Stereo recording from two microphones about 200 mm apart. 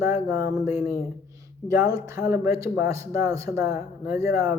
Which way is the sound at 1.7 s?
15° right (ahead or behind).